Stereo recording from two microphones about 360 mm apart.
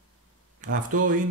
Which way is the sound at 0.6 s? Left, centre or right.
Right.